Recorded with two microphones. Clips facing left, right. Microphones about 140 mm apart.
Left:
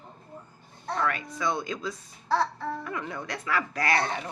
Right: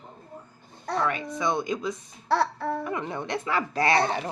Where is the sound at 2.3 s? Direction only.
65° right (ahead or behind).